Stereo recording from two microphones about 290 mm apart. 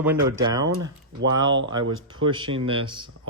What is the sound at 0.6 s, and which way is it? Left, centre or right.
Speech, right.